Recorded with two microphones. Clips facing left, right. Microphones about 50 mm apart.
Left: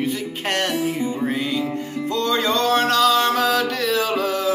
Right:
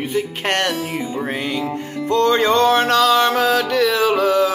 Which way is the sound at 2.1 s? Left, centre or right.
Right.